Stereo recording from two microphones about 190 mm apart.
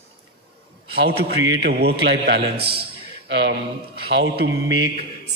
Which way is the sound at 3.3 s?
70° right (ahead or behind).